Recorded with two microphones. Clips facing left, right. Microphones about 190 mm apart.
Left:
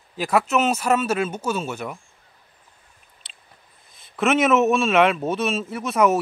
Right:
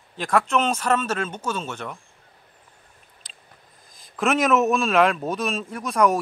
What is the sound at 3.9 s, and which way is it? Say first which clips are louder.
Speech: left 2 dB; centre (ahead or behind).